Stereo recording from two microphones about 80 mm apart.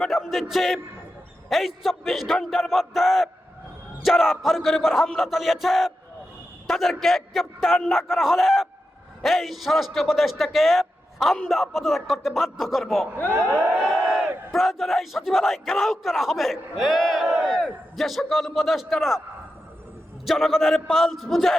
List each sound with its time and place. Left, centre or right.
0.0 s a man's voice: centre
13.5 s a sound: centre
13.7 s crowd: centre
14.5 s a man's voice: centre
17.2 s battle cry: right
17.5 s a man's voice: centre
20.2 s a man's voice: centre